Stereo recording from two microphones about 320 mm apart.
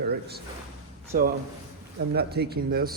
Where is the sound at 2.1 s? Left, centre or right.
Right.